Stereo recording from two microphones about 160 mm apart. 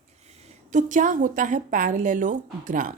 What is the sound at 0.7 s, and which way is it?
A woman's voice, 50° right (ahead or behind).